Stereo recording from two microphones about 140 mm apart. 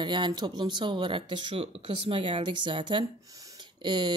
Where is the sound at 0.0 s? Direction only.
35° right (ahead or behind).